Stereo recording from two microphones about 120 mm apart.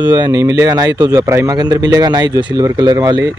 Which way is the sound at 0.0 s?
35° right (ahead or behind).